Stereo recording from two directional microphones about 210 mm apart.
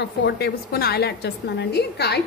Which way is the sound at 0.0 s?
50° left (ahead or behind).